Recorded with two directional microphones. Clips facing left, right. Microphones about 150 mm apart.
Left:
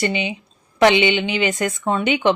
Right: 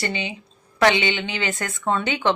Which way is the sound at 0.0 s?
20° left (ahead or behind).